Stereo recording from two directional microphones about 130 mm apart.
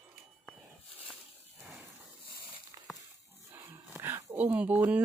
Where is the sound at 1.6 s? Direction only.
5° right (ahead or behind).